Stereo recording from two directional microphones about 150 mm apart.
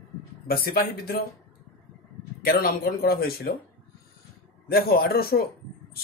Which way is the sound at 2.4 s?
85° left.